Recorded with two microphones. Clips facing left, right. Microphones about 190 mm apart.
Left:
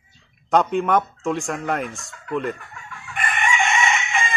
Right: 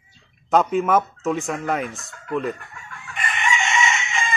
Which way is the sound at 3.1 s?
55° left (ahead or behind).